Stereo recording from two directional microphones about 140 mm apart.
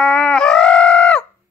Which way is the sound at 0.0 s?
5° left (ahead or behind).